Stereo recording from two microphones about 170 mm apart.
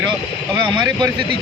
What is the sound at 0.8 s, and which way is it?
Speech, 25° right (ahead or behind).